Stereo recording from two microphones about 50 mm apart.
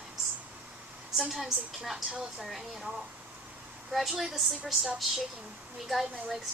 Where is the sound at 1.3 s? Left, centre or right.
Centre.